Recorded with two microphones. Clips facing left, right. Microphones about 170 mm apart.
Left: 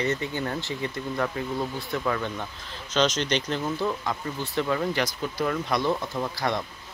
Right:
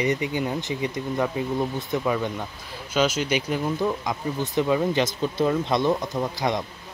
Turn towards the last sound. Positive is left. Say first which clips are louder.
# right 3 dB
turn(degrees=-20)  # may be behind; listen again after turning